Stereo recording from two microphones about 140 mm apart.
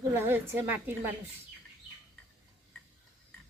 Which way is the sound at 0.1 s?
15° right (ahead or behind).